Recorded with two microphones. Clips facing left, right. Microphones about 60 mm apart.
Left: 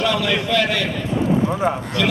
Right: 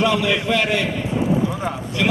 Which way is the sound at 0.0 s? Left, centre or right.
Right.